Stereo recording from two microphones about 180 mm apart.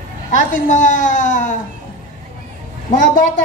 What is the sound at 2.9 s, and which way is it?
Child singing, 45° left (ahead or behind).